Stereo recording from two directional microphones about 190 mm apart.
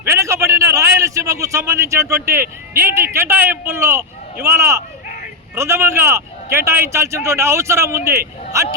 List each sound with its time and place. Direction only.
0.0 s a sound: 15° right (ahead or behind)
2.4 s speech: 50° right (ahead or behind)
3.0 s speech: 15° right (ahead or behind)